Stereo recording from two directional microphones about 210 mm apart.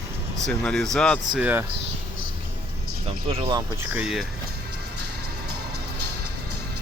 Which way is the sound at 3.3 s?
25° right (ahead or behind).